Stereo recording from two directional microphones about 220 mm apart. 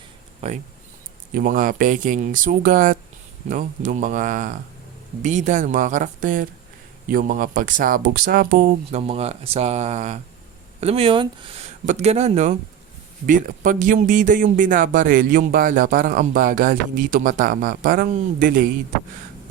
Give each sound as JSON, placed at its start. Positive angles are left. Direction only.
{"t": 0.4, "sound": "speech", "side_deg": -30}
{"t": 1.3, "sound": "speech", "side_deg": -40}